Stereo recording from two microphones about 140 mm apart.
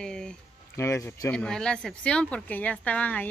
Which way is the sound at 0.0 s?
5° left (ahead or behind).